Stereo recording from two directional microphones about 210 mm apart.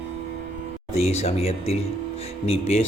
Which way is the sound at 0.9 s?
30° left (ahead or behind).